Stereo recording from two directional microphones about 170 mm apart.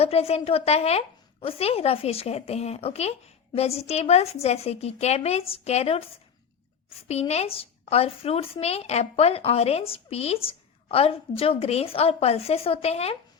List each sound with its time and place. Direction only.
0.0 s speech: 35° left (ahead or behind)
7.1 s speech: 40° left (ahead or behind)